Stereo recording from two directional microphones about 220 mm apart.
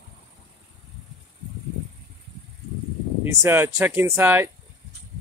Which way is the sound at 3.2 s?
10° right (ahead or behind).